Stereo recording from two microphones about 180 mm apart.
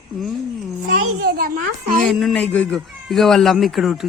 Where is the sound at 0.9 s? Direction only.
55° right (ahead or behind).